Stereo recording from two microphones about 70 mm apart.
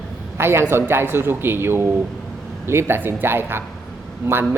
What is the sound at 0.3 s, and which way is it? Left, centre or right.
A woman's voice, right.